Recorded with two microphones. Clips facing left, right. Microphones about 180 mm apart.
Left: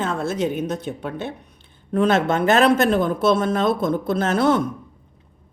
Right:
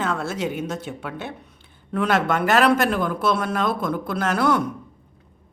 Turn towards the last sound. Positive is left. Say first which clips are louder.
# left 3 dB
turn(degrees=25)  # may be behind; listen again after turning